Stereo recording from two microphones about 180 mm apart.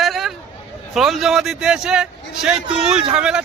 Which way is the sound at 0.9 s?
Centre (ahead or behind).